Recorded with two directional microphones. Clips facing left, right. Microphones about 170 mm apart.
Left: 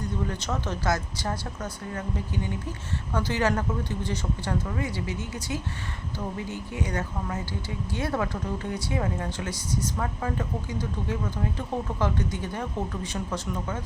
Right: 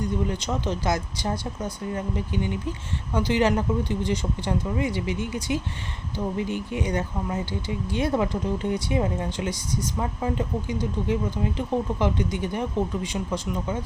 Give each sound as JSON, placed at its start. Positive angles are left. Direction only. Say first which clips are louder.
{"t": 0.0, "sound": "speech", "louder": "right 4 dB", "side_deg": -15}